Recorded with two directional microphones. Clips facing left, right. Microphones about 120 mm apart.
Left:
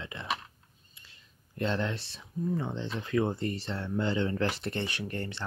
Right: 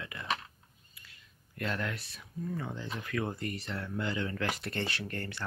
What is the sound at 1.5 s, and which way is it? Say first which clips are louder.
Speech: left 5 dB; 25° left (ahead or behind).